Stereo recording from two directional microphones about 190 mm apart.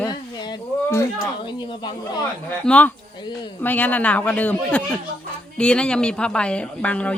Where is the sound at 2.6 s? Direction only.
5° left (ahead or behind).